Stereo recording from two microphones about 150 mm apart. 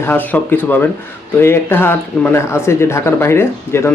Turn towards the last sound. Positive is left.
turn(degrees=15)  # may be behind; listen again after turning